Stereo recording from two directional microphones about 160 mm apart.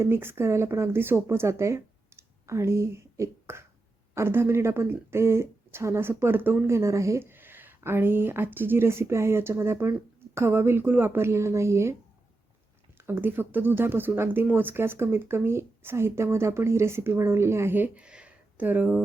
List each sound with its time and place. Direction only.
0.0 s speech: 15° right (ahead or behind)
13.0 s speech: 15° right (ahead or behind)